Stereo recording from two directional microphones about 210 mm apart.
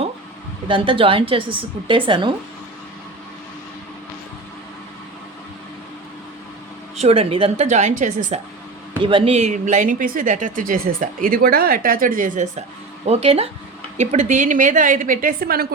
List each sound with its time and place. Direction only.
0.7 s a woman's voice: 25° right (ahead or behind)
6.9 s speech: 30° right (ahead or behind)
9.0 s speech: 25° right (ahead or behind); by 12.5 s 40° right (ahead or behind)
13.1 s a woman's voice: 30° right (ahead or behind); by 15.6 s 45° right (ahead or behind)